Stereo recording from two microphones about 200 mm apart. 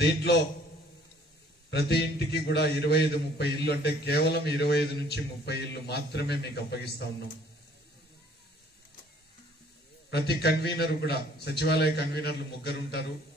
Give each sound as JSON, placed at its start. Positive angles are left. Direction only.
{"t": 0.0, "sound": "a man's voice", "side_deg": 55}
{"t": 1.7, "sound": "a man's voice", "side_deg": 55}
{"t": 10.1, "sound": "a man's voice", "side_deg": 55}